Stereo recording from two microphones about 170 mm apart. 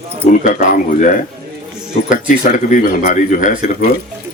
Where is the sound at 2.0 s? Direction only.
50° left (ahead or behind).